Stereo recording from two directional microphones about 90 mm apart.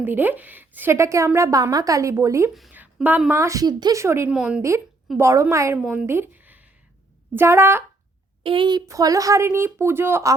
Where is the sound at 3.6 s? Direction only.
50° right (ahead or behind).